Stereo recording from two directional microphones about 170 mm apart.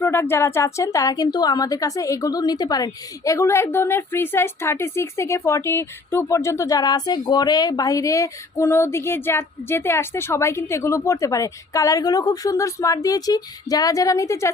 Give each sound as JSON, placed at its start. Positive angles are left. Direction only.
{"t": 0.0, "sound": "a woman's voice", "side_deg": 15}